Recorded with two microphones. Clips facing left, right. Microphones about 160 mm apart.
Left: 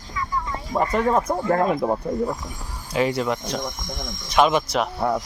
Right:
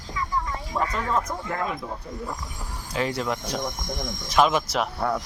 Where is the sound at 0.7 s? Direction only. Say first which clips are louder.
Left 6 dB; 45° left (ahead or behind).